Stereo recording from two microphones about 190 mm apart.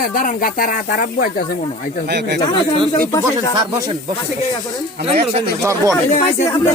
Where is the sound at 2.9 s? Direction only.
20° left (ahead or behind).